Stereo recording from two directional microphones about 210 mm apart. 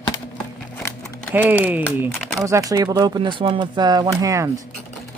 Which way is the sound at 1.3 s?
10° right (ahead or behind).